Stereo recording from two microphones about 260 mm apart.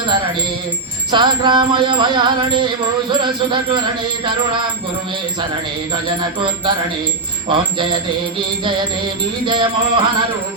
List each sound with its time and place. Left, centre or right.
0.0 s wind chime: centre
1.1 s music: centre
5.9 s music: centre
9.5 s music: centre